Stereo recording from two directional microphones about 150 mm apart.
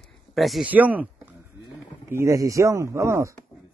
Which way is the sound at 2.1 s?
20° right (ahead or behind).